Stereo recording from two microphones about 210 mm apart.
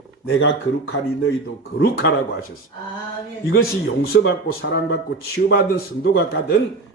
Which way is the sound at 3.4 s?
50° left (ahead or behind).